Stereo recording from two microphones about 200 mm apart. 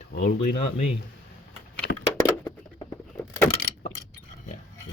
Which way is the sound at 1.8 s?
60° left (ahead or behind).